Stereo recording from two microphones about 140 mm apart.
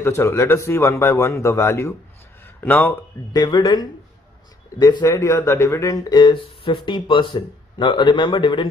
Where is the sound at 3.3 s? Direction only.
30° left (ahead or behind).